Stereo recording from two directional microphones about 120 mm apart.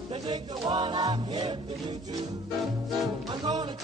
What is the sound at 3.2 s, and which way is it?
Music, 35° right (ahead or behind).